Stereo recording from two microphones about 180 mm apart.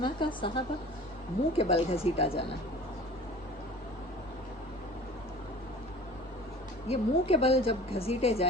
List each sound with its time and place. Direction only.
0.0 s a woman's voice: 25° left (ahead or behind)
6.8 s a woman's voice: 35° left (ahead or behind)